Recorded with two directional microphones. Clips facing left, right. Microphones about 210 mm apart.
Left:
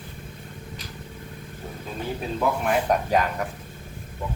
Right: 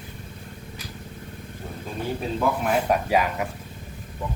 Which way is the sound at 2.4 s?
Centre (ahead or behind).